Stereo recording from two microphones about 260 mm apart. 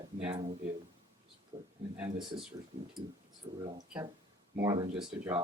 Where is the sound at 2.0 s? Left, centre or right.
Centre.